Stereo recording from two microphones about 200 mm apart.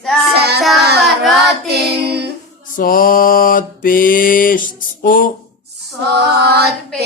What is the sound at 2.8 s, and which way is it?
Mantra, 45° left (ahead or behind).